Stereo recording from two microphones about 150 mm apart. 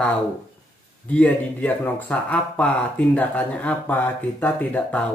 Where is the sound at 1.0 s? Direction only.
10° left (ahead or behind).